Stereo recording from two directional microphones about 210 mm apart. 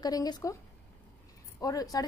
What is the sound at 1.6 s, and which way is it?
Speech, 15° left (ahead or behind).